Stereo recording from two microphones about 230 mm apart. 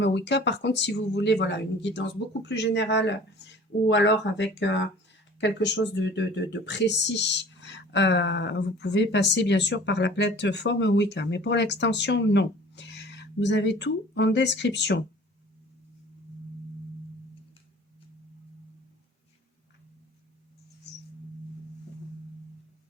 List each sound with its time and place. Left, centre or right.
0.0 s speech: left